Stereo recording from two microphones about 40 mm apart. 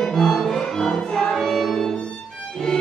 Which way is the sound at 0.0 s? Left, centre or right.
Centre.